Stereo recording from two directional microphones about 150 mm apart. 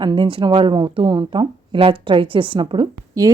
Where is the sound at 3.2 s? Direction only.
20° right (ahead or behind).